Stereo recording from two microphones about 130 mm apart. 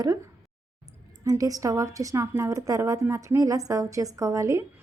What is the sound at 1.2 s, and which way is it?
Speech, 25° right (ahead or behind).